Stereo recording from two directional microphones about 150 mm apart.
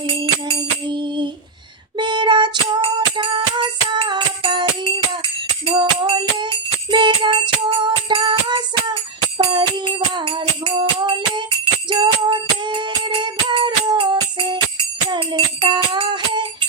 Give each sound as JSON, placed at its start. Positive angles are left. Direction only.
{"t": 0.1, "sound": "music", "side_deg": -35}
{"t": 5.7, "sound": "music", "side_deg": -25}